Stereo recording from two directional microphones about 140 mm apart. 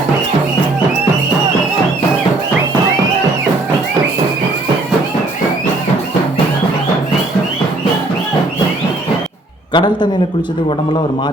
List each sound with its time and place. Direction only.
9.7 s a man's voice: 30° left (ahead or behind)